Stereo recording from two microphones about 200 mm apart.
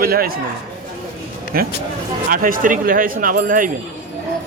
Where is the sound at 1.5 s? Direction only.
45° right (ahead or behind).